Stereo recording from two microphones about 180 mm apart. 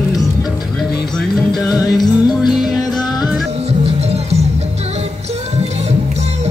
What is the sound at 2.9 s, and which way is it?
Music, 20° left (ahead or behind).